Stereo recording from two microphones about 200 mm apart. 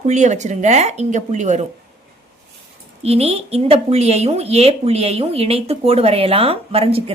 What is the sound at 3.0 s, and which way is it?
A woman's voice, 30° right (ahead or behind).